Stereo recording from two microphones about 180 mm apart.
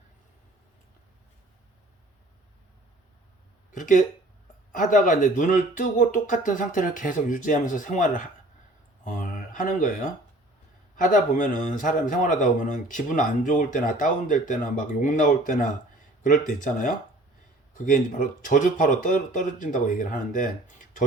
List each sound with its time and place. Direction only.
3.8 s a man's voice: 45° left (ahead or behind)
9.0 s a sound: 45° left (ahead or behind)
10.9 s a man's voice: 45° left (ahead or behind)